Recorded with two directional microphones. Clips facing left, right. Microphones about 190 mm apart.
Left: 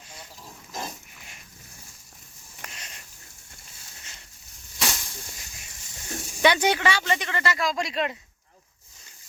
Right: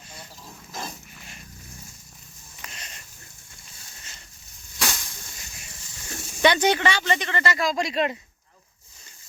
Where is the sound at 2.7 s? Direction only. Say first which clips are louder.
Right 1 dB; 10° left (ahead or behind).